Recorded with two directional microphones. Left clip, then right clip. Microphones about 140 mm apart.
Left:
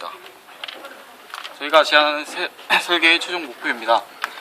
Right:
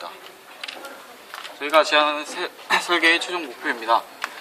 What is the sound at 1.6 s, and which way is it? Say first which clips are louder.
A man's voice: left 3 dB; 45° left (ahead or behind).